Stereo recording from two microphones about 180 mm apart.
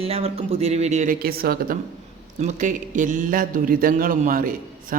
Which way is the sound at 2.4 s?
45° right (ahead or behind).